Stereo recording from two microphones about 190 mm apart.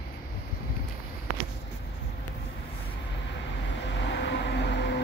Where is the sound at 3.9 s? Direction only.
65° left (ahead or behind).